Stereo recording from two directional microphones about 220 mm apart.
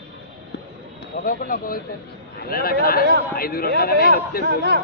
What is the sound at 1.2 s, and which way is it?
Speech, 40° left (ahead or behind).